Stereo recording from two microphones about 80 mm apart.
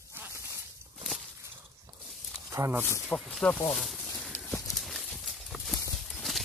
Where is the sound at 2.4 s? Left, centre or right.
Right.